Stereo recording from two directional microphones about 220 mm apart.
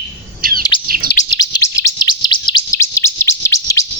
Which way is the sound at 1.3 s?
20° left (ahead or behind).